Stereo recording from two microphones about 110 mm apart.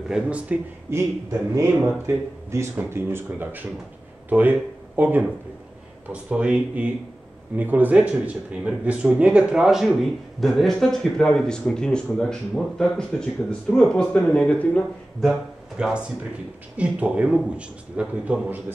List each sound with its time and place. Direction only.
0.1 s a man's voice: 10° right (ahead or behind)
1.5 s a man's voice: 25° right (ahead or behind); by 14.9 s 10° left (ahead or behind)
15.8 s a man's voice: 10° right (ahead or behind)